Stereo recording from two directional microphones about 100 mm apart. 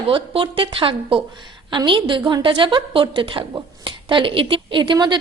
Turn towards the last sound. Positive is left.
turn(degrees=-50)  # may be behind; listen again after turning